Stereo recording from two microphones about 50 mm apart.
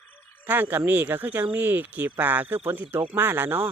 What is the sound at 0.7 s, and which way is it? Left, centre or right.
Speech, right.